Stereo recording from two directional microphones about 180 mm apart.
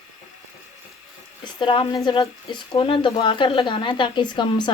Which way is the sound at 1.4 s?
30° left (ahead or behind).